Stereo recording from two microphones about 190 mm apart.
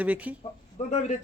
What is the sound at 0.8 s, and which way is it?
Speech, 35° left (ahead or behind).